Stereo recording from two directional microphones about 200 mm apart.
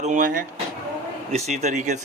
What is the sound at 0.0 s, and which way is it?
Speech, 40° right (ahead or behind).